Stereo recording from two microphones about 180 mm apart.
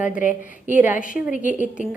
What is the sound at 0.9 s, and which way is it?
Speech, 45° left (ahead or behind).